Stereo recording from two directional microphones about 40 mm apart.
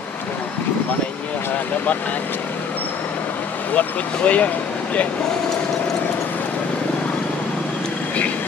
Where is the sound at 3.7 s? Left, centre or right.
Left.